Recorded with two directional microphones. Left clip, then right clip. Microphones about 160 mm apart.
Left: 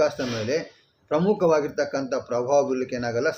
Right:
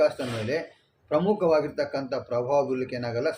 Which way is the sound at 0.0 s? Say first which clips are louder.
Left 1 dB; 25° left (ahead or behind).